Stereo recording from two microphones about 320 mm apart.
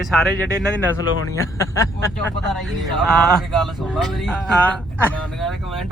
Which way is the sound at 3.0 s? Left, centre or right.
Centre.